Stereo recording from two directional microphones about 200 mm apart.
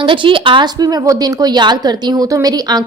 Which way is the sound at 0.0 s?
25° right (ahead or behind).